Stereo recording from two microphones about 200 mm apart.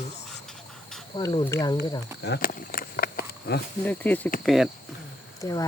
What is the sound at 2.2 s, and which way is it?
Speech, 50° left (ahead or behind).